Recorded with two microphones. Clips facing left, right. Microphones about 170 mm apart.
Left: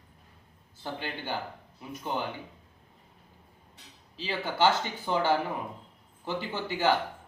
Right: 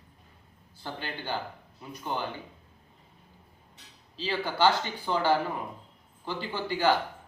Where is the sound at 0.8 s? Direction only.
15° left (ahead or behind).